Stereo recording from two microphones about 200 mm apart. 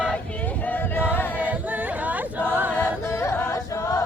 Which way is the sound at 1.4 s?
10° right (ahead or behind).